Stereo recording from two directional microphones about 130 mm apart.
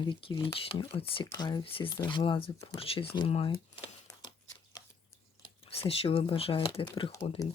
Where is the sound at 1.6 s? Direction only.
45° left (ahead or behind).